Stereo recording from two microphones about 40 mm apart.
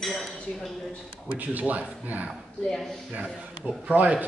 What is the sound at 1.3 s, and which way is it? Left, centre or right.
Speech, right.